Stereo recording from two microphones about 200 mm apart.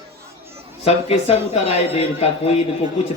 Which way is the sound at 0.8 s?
30° left (ahead or behind).